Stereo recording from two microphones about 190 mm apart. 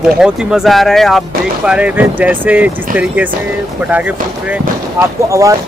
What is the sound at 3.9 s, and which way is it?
Speech, 10° right (ahead or behind).